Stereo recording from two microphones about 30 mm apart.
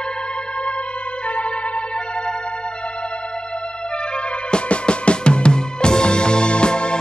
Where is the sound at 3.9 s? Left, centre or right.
Left.